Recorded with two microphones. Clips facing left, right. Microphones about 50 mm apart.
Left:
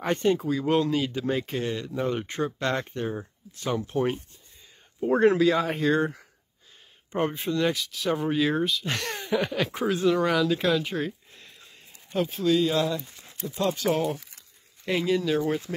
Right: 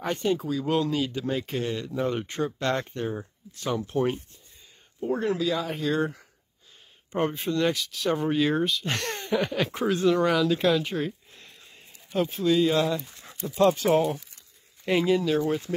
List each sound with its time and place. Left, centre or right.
0.1 s speech: centre
1.9 s speech: centre
2.2 s speech: centre
5.4 s speech: left
5.7 s speech: left
7.2 s speech: centre
13.6 s speech: right
14.9 s speech: centre
15.3 s speech: centre